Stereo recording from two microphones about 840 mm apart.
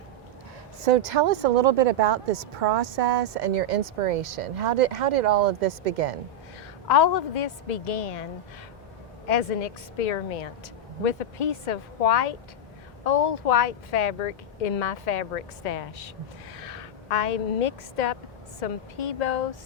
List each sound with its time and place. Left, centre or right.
1.0 s speech: right
4.3 s speech: right
6.8 s a woman's voice: left